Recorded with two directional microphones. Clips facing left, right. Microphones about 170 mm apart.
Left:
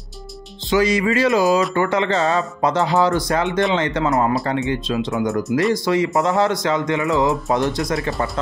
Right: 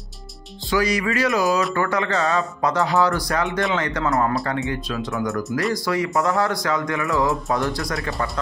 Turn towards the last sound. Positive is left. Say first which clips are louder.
# left 4 dB
turn(degrees=20)  # may be behind; listen again after turning